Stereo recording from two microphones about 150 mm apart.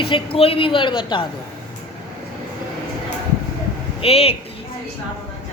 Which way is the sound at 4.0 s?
40° left (ahead or behind).